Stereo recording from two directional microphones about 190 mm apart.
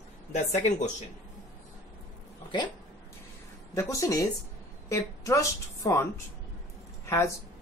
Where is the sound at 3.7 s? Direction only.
15° left (ahead or behind).